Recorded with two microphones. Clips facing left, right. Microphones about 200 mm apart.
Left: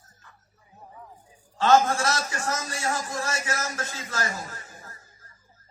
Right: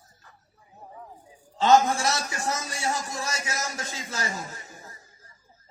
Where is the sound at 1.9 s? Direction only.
10° right (ahead or behind).